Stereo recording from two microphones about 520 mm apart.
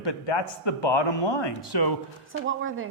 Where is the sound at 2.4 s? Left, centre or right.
Right.